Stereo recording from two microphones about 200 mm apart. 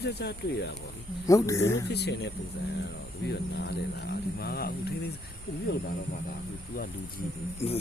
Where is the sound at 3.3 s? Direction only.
55° left (ahead or behind).